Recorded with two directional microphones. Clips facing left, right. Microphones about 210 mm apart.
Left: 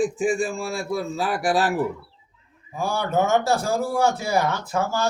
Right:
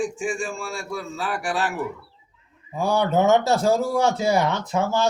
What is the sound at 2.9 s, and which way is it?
Speech, 20° right (ahead or behind).